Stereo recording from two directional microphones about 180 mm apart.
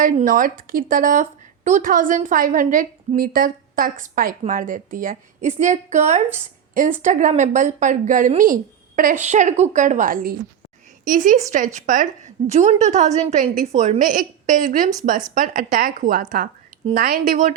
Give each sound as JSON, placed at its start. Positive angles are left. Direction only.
{"t": 0.0, "sound": "a woman's voice", "side_deg": -50}